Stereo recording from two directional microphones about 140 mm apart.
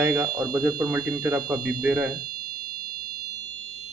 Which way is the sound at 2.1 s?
90° right.